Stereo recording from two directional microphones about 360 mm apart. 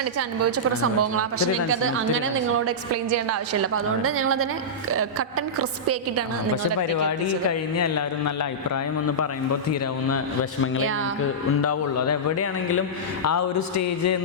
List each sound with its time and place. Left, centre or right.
0.0 s a woman's voice: right
7.8 s a man's voice: left
10.8 s a woman's voice: right
11.6 s a man's voice: left